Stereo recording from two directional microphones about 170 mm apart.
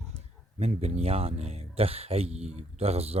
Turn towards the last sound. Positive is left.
turn(degrees=-35)  # may be behind; listen again after turning